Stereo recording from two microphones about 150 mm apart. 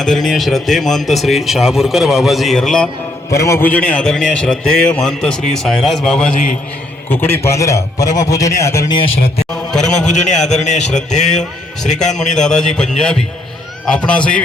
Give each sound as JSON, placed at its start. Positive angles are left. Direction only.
{"t": 0.0, "sound": "a man's voice", "side_deg": 5}
{"t": 3.3, "sound": "a man's voice", "side_deg": 20}
{"t": 9.5, "sound": "a man's voice", "side_deg": 5}
{"t": 10.1, "sound": "speech", "side_deg": 50}
{"t": 12.1, "sound": "a man's voice", "side_deg": 5}